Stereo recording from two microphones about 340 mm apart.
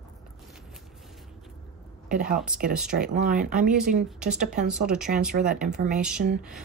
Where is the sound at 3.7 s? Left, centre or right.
Centre.